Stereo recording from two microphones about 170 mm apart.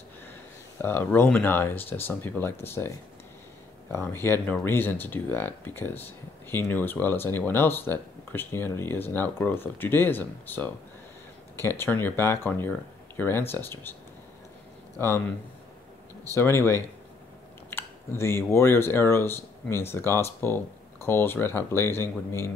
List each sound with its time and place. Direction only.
0.8 s speech: 15° left (ahead or behind)
3.9 s speech: 15° left (ahead or behind)
15.0 s speech: 15° left (ahead or behind)
16.3 s speech: 15° left (ahead or behind)